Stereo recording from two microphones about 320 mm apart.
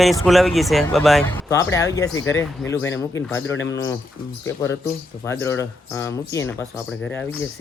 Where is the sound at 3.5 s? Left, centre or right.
Left.